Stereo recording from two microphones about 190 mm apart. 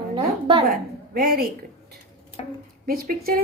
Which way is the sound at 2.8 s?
50° right (ahead or behind).